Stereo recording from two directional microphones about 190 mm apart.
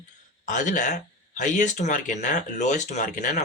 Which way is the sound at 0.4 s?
40° left (ahead or behind).